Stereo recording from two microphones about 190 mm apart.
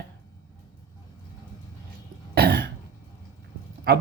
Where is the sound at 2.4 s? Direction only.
55° right (ahead or behind).